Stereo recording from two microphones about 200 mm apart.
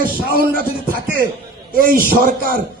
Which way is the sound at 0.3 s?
45° right (ahead or behind).